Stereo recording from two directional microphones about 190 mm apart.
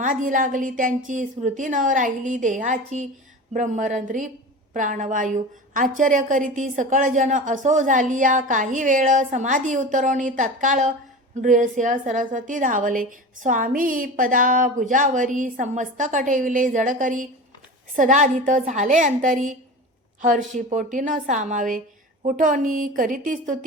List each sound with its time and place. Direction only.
0.0 s a woman's voice: 45° right (ahead or behind)
20.6 s a woman's voice: 40° right (ahead or behind)